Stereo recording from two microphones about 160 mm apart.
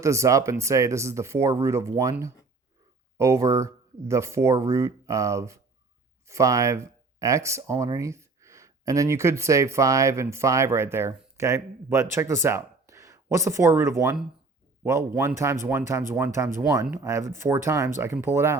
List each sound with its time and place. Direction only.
0.0 s speech: 20° right (ahead or behind)
15.2 s speech: 20° right (ahead or behind)